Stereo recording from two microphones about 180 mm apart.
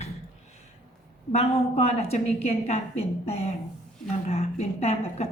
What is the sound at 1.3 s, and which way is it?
A woman's voice, 35° left (ahead or behind).